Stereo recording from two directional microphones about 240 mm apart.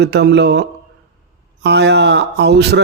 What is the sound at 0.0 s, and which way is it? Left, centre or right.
Speech, right.